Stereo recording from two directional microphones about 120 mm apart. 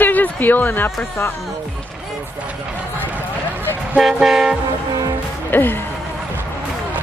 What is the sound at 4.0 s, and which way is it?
Toot, centre (ahead or behind).